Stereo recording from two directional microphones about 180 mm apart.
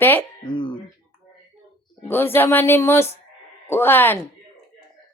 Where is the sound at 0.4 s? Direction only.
25° left (ahead or behind).